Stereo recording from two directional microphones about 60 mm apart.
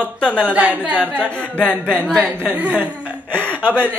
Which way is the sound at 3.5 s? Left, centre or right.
Left.